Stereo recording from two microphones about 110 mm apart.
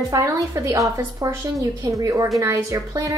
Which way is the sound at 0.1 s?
30° right (ahead or behind).